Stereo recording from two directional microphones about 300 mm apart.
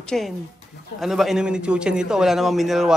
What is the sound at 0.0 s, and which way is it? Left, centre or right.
A woman's voice, centre.